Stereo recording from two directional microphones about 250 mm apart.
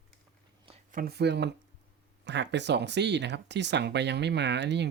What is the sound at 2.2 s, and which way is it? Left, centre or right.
Speech, right.